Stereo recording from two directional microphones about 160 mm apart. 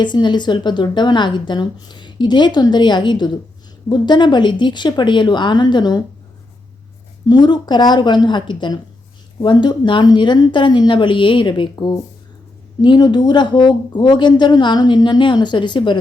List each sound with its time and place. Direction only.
0.0 s a woman's voice: 30° left (ahead or behind)
7.3 s a woman's voice: 25° left (ahead or behind)